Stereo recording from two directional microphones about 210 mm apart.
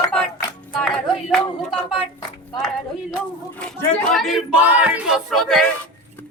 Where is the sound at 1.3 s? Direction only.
Centre (ahead or behind).